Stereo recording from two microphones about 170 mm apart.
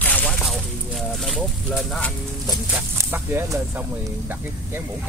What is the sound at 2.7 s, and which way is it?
Speech, 15° right (ahead or behind).